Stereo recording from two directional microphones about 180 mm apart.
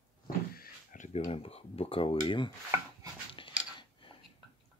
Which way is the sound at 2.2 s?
25° left (ahead or behind).